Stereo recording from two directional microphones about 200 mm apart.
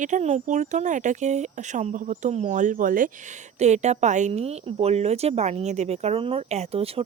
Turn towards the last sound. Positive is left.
turn(degrees=-30)  # may be behind; listen again after turning